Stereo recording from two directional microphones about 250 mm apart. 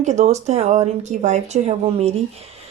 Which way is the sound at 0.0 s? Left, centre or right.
Right.